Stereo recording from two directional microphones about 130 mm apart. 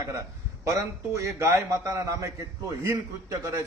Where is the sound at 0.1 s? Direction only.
25° right (ahead or behind).